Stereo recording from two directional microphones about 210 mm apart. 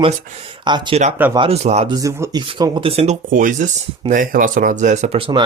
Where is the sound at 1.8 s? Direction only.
15° right (ahead or behind); by 5.3 s 30° right (ahead or behind).